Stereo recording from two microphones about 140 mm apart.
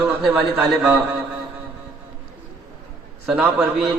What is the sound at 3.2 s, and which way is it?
Speech, 5° right (ahead or behind).